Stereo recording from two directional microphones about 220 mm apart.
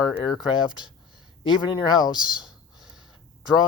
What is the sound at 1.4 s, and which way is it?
Speech, 20° left (ahead or behind).